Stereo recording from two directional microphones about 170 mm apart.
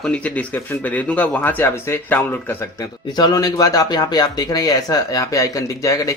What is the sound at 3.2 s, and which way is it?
Speech, 25° left (ahead or behind).